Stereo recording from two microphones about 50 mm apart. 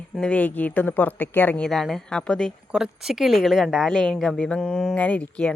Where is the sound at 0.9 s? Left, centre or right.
Left.